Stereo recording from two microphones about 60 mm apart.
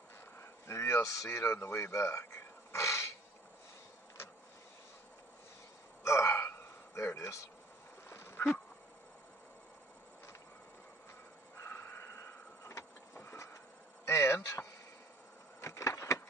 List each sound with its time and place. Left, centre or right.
0.4 s a man's voice: left
6.0 s gasp: left
6.9 s speech: left
8.1 s a sound: left
12.6 s printer: left
14.0 s a sound: left